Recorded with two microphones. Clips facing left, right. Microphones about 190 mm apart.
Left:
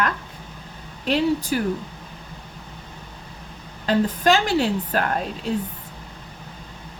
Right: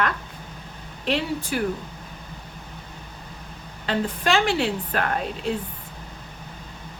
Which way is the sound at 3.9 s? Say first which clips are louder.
Left 5 dB; 40° left (ahead or behind).